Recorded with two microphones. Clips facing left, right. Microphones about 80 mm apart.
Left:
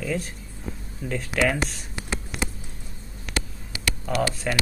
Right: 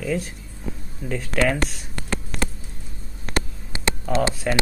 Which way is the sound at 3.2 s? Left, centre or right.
Right.